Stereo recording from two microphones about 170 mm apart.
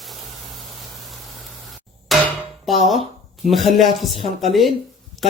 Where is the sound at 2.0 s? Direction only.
Centre (ahead or behind).